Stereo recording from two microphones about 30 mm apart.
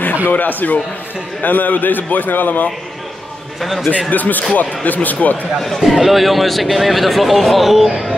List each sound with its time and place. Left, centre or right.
0.3 s a man's voice: left
3.6 s speech: centre
4.1 s speech: left
5.8 s speech: centre